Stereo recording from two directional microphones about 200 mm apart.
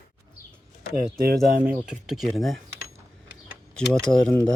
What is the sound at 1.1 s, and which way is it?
Speech, 50° right (ahead or behind).